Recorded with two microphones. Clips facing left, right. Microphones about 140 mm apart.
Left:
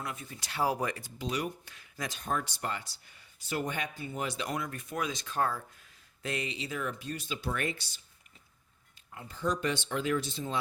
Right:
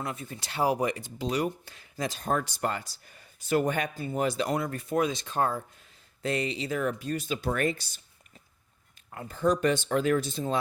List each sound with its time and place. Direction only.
0.0 s speech: 30° right (ahead or behind)
1.2 s speech: 35° right (ahead or behind)
2.2 s speech: 45° right (ahead or behind); by 5.6 s 25° right (ahead or behind)
6.2 s speech: 35° right (ahead or behind)
9.0 s speech: 50° right (ahead or behind)